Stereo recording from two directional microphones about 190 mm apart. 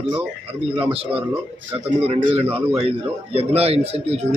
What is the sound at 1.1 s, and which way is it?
Speech, 10° right (ahead or behind).